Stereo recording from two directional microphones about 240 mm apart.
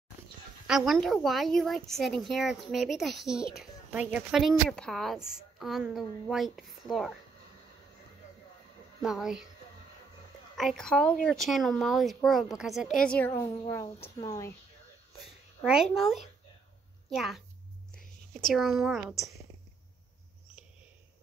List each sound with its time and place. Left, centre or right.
0.7 s a woman's voice: centre
9.0 s a woman's voice: centre
10.5 s a woman's voice: centre
13.9 s speech: left
15.6 s a woman's voice: centre